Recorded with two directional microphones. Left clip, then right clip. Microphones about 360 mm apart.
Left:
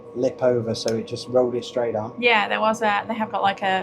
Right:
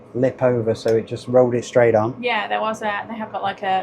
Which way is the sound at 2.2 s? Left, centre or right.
Left.